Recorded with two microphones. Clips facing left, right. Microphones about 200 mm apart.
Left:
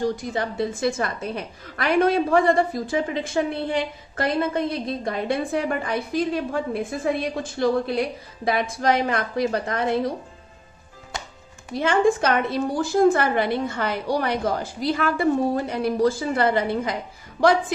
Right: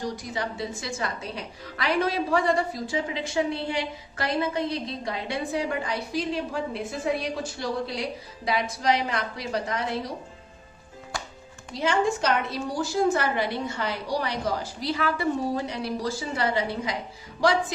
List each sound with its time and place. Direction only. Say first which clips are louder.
0.0 s a woman's voice: left 6 dB; 55° left (ahead or behind)
11.1 s music: left 1 dB; 20° left (ahead or behind)
11.7 s a woman's voice: left 5 dB; 55° left (ahead or behind)